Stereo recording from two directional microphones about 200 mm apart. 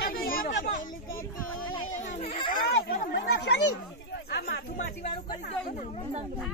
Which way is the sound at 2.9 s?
45° left (ahead or behind).